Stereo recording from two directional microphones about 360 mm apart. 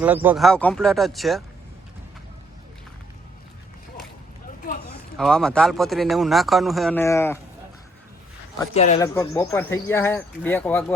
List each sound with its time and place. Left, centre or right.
0.0 s a man's voice: centre
5.1 s a man's voice: centre
8.5 s speech: centre
9.1 s speech: centre